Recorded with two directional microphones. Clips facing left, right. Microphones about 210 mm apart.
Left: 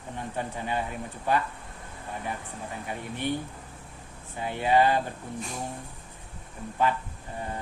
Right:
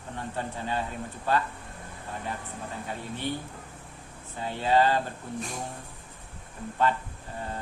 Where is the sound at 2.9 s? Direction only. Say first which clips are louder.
Left 2 dB; 15° left (ahead or behind).